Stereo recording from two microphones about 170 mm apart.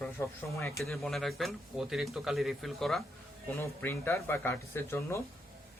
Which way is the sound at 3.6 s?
15° left (ahead or behind).